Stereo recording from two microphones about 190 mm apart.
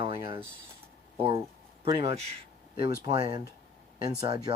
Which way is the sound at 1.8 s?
30° right (ahead or behind).